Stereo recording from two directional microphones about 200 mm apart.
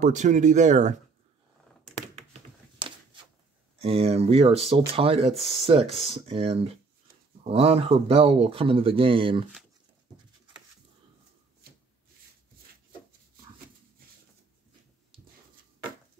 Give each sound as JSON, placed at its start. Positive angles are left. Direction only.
{"t": 0.0, "sound": "speech", "side_deg": -35}
{"t": 3.8, "sound": "speech", "side_deg": -30}